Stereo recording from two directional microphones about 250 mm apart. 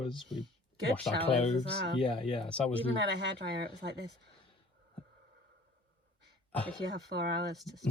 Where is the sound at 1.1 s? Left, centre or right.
Centre.